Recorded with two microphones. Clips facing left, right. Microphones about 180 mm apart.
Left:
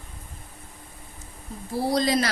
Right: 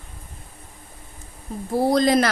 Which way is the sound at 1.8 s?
50° right (ahead or behind).